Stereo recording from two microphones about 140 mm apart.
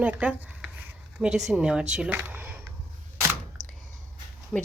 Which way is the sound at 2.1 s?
15° right (ahead or behind).